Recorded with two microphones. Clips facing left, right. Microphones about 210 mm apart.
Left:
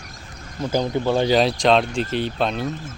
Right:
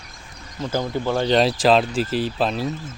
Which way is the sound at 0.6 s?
15° left (ahead or behind).